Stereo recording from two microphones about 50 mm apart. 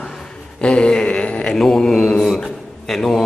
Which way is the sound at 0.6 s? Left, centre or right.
Centre.